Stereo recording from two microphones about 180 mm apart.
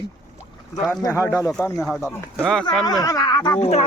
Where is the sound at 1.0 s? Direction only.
15° left (ahead or behind).